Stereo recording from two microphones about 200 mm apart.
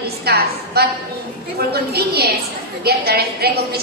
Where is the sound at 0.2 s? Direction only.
50° right (ahead or behind).